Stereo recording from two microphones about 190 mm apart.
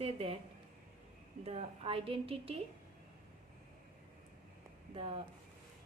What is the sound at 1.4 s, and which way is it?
A woman's voice, 35° right (ahead or behind).